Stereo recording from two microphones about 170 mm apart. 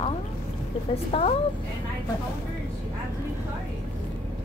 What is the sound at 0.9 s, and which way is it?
Speech, 35° left (ahead or behind).